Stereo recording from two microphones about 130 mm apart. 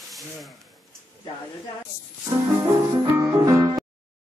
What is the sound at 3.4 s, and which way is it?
Music, 15° right (ahead or behind).